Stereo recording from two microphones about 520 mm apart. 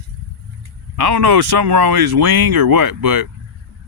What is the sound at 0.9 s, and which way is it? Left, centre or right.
Speech, right.